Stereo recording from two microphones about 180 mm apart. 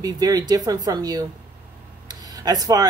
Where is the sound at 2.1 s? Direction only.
20° right (ahead or behind).